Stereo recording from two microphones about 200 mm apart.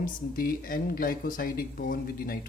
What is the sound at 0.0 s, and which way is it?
Speech, 45° left (ahead or behind).